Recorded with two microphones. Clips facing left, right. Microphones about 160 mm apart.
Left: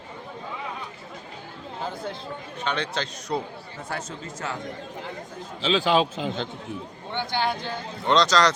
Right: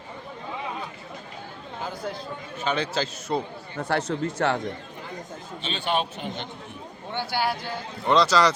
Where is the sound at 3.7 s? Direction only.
65° right (ahead or behind).